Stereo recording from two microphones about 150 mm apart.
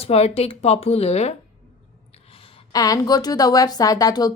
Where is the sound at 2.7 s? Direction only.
25° left (ahead or behind).